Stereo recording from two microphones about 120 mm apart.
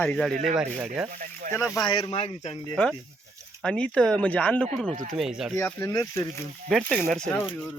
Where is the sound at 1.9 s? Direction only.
50° left (ahead or behind).